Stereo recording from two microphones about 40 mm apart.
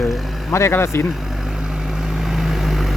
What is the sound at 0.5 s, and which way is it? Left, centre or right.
Speech, left.